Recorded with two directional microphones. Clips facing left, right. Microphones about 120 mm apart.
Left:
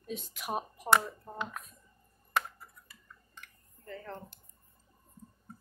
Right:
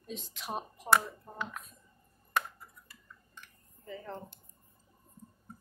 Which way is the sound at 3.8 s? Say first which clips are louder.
Right 1 dB; 5° right (ahead or behind).